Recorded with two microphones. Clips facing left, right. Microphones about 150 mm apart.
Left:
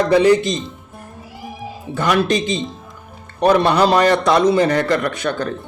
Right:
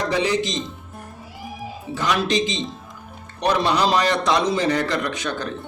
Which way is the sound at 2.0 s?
55° left (ahead or behind).